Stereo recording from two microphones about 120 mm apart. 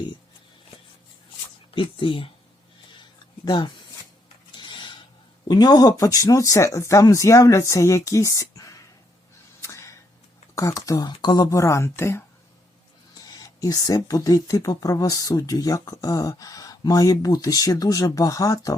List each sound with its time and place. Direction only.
1.7 s speech: 45° left (ahead or behind)
3.4 s speech: 35° left (ahead or behind)
4.5 s mechanisms: 40° left (ahead or behind)
5.5 s speech: 35° left (ahead or behind)
9.6 s a sound: 25° left (ahead or behind)
10.5 s speech: 25° left (ahead or behind)
13.2 s speech: 30° left (ahead or behind)